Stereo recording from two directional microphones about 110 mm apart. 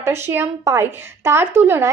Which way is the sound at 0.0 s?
20° right (ahead or behind).